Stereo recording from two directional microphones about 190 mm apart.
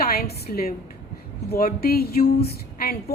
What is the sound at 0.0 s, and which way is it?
A woman's voice, 55° left (ahead or behind).